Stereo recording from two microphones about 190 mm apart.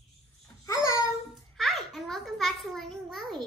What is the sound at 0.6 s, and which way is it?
Babbling, 15° left (ahead or behind).